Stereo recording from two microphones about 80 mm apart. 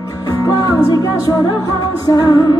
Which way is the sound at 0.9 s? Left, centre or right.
Left.